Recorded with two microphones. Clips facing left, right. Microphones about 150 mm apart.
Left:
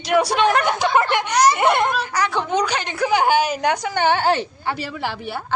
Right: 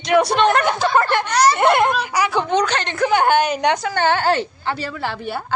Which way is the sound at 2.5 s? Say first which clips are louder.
Right 2 dB; 10° left (ahead or behind).